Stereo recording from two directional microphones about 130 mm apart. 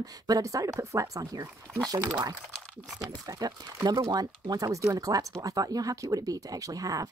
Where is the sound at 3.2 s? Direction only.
30° right (ahead or behind).